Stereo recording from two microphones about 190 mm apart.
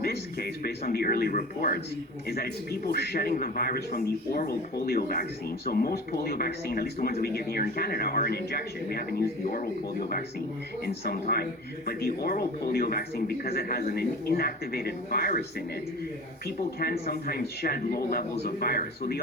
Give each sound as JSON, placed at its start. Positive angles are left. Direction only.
{"t": 0.0, "sound": "speech", "side_deg": 55}
{"t": 16.8, "sound": "speech", "side_deg": 55}